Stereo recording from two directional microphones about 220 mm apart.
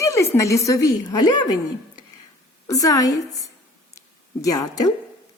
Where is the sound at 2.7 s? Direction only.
15° left (ahead or behind).